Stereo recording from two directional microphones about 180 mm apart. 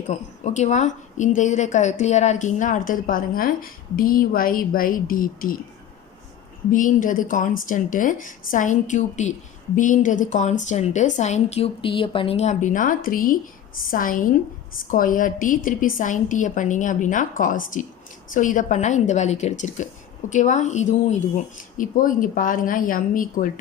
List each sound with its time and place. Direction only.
0.1 s a woman's voice: 40° left (ahead or behind)
6.7 s a woman's voice: 50° left (ahead or behind)